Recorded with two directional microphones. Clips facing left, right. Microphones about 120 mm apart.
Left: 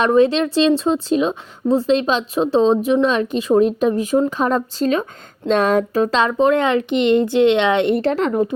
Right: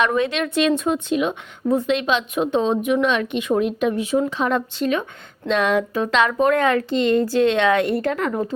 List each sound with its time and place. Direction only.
0.0 s a woman's voice: 35° left (ahead or behind)